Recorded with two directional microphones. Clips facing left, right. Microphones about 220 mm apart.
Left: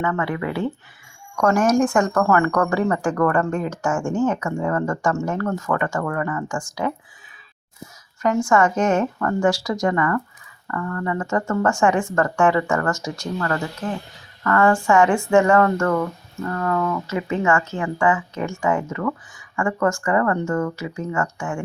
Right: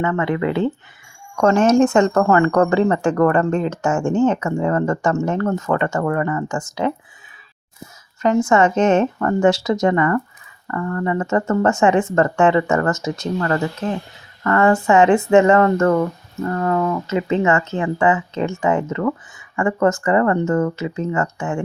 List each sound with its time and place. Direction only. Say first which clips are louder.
0.0 s speech: right 4 dB; 20° right (ahead or behind)
8.2 s speech: right 3 dB; 20° right (ahead or behind)